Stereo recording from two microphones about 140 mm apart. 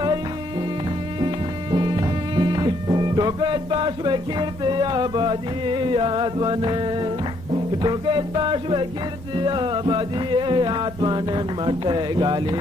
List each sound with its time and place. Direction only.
1.2 s music: 30° right (ahead or behind)